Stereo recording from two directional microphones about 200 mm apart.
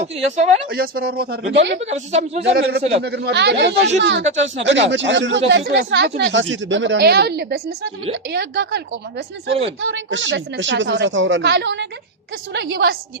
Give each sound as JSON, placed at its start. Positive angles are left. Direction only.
{"t": 0.0, "sound": "speech", "side_deg": -35}
{"t": 0.7, "sound": "speech", "side_deg": -50}
{"t": 1.8, "sound": "speech", "side_deg": -35}
{"t": 2.4, "sound": "speech", "side_deg": -55}
{"t": 4.2, "sound": "speech", "side_deg": -35}
{"t": 4.5, "sound": "speech", "side_deg": -65}
{"t": 9.5, "sound": "speech", "side_deg": -30}
{"t": 9.9, "sound": "speech", "side_deg": -70}